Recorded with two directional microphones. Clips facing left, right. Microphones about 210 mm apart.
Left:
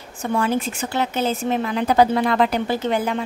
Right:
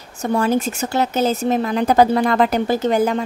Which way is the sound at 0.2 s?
40° right (ahead or behind).